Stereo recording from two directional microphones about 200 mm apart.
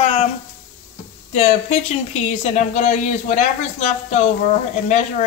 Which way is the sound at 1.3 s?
35° left (ahead or behind).